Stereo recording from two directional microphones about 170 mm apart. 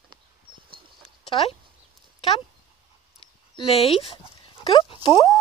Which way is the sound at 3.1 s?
35° left (ahead or behind).